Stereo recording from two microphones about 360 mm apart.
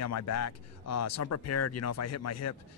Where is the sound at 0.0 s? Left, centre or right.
Left.